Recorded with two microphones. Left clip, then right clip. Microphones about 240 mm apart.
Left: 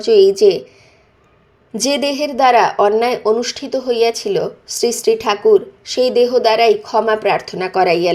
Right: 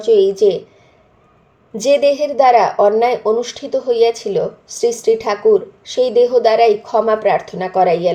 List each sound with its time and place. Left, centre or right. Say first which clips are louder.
0.0 s a woman's voice: left 2 dB; left
1.7 s a woman's voice: right 5 dB; left